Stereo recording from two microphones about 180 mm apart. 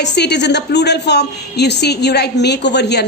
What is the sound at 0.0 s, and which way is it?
A woman's voice, 70° left (ahead or behind).